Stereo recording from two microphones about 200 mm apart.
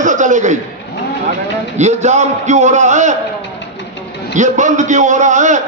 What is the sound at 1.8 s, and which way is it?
A man's voice, 35° right (ahead or behind).